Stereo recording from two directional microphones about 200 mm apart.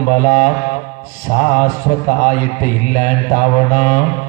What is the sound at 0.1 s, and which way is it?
A man's voice, 45° left (ahead or behind).